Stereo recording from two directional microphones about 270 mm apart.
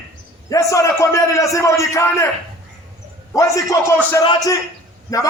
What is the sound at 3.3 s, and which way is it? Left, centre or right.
A man's voice, centre.